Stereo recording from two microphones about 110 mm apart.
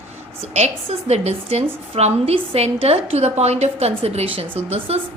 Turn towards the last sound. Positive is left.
turn(degrees=-65)  # may be behind; listen again after turning